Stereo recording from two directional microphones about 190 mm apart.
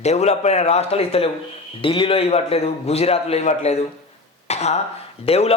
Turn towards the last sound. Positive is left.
turn(degrees=30)  # may be behind; listen again after turning